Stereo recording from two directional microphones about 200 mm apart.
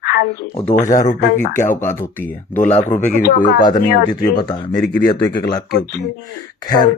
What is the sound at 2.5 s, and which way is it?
Speech, 35° left (ahead or behind).